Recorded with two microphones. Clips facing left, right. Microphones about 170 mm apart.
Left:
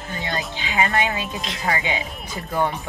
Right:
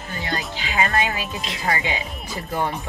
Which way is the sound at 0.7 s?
20° left (ahead or behind).